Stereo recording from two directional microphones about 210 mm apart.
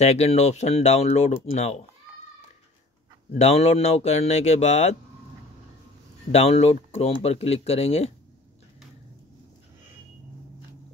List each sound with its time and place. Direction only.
0.0 s speech: 30° left (ahead or behind)
3.3 s speech: 30° left (ahead or behind)
6.3 s speech: 30° left (ahead or behind)